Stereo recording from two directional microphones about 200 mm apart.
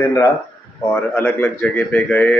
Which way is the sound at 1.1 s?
10° left (ahead or behind).